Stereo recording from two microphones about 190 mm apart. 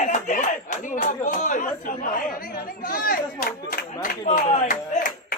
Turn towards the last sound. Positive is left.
turn(degrees=45)  # may be behind; listen again after turning